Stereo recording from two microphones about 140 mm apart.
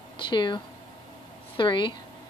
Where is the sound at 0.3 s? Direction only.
35° left (ahead or behind).